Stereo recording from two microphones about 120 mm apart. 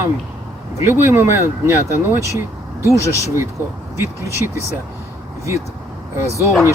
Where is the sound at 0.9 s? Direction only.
20° right (ahead or behind).